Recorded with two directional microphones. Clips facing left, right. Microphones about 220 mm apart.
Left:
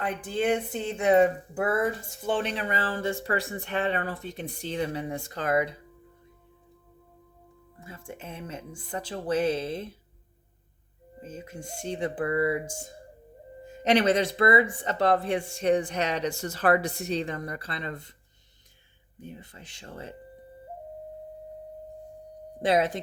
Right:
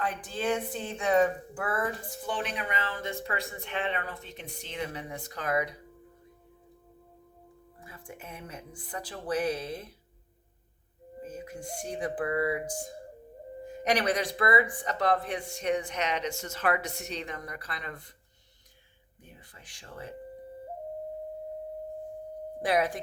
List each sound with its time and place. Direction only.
0.5 s speech: 20° left (ahead or behind)
7.8 s speech: 25° left (ahead or behind)
11.2 s speech: 25° left (ahead or behind)
13.8 s speech: 25° left (ahead or behind)
19.2 s speech: 25° left (ahead or behind)
22.6 s speech: 25° left (ahead or behind)